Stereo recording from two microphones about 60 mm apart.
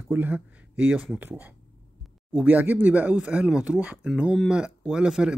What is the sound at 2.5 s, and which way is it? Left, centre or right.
Speech, right.